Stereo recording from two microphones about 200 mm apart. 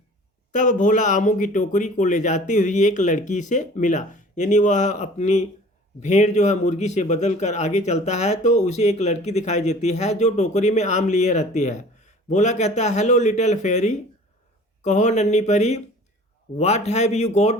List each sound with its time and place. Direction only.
0.5 s a man's voice: 40° left (ahead or behind)